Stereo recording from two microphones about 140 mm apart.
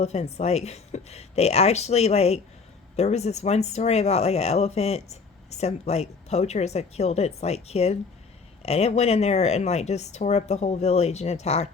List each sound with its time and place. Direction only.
0.0 s speech: 50° left (ahead or behind)